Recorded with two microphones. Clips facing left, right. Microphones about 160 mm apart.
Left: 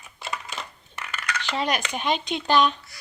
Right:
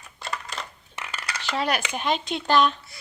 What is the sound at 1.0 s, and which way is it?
Dishes, 30° right (ahead or behind).